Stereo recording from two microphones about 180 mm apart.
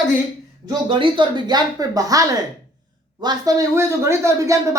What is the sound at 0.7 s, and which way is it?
Speech, 30° right (ahead or behind).